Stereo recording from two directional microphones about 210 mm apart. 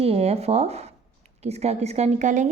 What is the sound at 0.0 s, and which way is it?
A woman's voice, 30° right (ahead or behind).